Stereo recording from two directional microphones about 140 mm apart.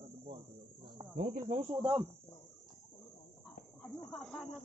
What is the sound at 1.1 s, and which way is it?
Speech, 75° right (ahead or behind).